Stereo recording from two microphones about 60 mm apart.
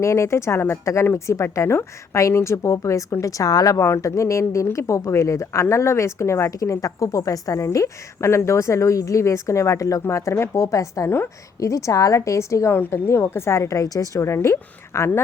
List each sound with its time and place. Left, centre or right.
0.0 s a woman's voice: left
3.8 s a woman's voice: left
14.3 s a woman's voice: left